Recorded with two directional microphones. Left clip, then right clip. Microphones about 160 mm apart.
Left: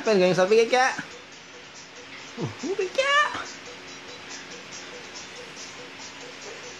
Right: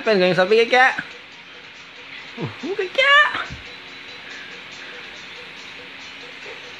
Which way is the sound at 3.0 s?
20° right (ahead or behind).